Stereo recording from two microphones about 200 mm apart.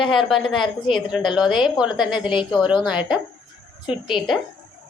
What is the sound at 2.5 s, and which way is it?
Speech, 20° left (ahead or behind).